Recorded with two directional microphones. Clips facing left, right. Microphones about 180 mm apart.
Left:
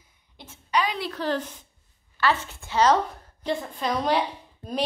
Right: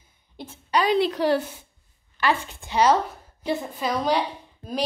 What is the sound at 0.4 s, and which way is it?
Speech, 35° right (ahead or behind).